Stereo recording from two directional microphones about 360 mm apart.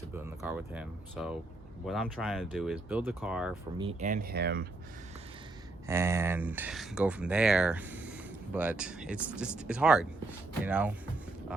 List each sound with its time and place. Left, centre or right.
0.1 s speech: centre
3.8 s speech: centre
5.9 s speech: centre